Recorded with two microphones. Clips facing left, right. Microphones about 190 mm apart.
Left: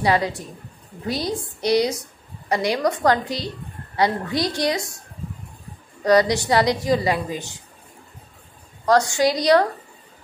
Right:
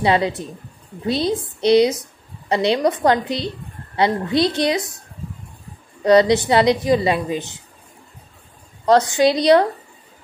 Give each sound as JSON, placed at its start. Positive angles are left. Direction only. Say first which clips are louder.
{"t": 0.0, "sound": "a woman's voice", "louder": "right 3 dB", "side_deg": -20}
{"t": 6.0, "sound": "a woman's voice", "louder": "right 4 dB", "side_deg": -25}
{"t": 8.8, "sound": "a woman's voice", "louder": "right 3 dB", "side_deg": -20}